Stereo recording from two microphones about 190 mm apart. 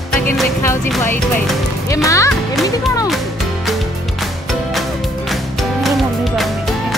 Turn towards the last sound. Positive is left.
turn(degrees=0)  # may be behind; listen again after turning